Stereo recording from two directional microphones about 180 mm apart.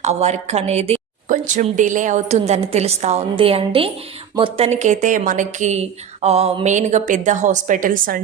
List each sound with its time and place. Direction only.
0.0 s a woman's voice: 35° right (ahead or behind)